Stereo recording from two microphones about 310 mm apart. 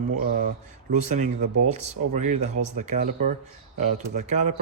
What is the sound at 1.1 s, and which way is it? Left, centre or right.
Speech, right.